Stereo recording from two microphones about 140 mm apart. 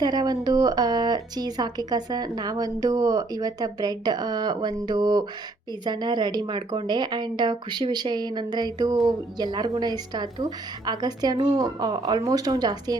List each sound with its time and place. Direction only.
0.0 s speech: 30° right (ahead or behind)